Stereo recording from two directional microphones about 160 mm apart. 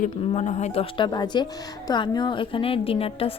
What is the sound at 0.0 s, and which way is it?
A woman's voice, 50° left (ahead or behind).